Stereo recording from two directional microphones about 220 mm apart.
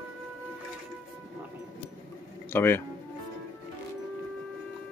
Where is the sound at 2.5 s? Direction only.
10° left (ahead or behind).